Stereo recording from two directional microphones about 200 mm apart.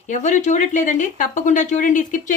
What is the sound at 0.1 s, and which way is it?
Speech, 40° left (ahead or behind).